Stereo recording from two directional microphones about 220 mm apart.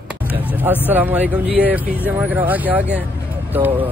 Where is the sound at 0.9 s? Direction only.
10° right (ahead or behind).